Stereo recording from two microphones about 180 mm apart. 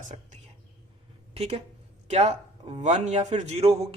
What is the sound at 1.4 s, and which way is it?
A woman's voice, 35° right (ahead or behind).